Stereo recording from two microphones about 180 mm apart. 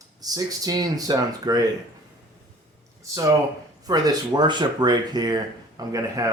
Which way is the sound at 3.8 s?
20° right (ahead or behind).